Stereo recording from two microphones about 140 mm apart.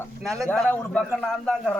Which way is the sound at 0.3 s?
5° left (ahead or behind).